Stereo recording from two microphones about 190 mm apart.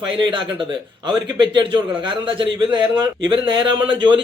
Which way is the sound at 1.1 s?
25° right (ahead or behind).